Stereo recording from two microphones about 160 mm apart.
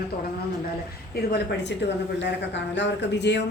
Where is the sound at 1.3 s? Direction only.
90° left.